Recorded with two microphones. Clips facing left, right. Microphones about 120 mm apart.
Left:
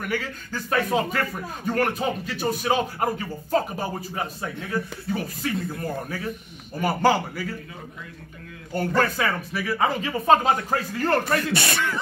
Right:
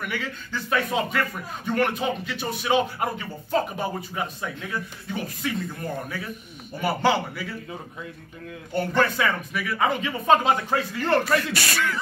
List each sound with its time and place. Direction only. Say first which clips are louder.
0.0 s speech: left 2 dB; 40° left (ahead or behind)
8.7 s speech: even; 40° left (ahead or behind)
11.5 s speech: left 1 dB; 25° left (ahead or behind)